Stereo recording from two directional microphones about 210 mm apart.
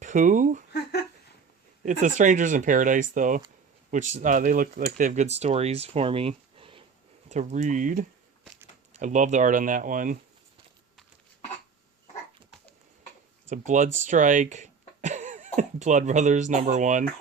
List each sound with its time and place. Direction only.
0.0 s speech: 35° right (ahead or behind)
0.7 s a sound: 50° left (ahead or behind)
1.8 s speech: 35° right (ahead or behind)
13.5 s speech: 35° right (ahead or behind)